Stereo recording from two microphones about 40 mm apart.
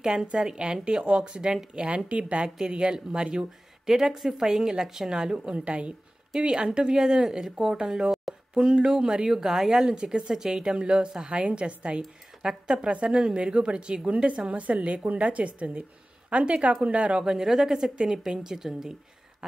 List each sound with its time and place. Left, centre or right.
0.0 s speech: centre
2.0 s a woman's voice: right
2.6 s speech: right
9.8 s speech: right
12.0 s a woman's voice: centre; by 17.2 s right
17.2 s speech: centre